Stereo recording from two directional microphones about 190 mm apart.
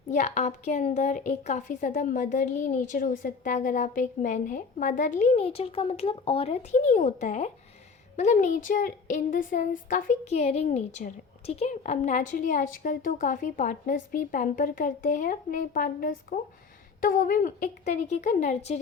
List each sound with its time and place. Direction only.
0.1 s a woman's voice: 40° left (ahead or behind)